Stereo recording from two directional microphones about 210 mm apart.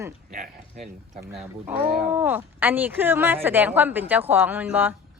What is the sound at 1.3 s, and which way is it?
Speech, 5° right (ahead or behind).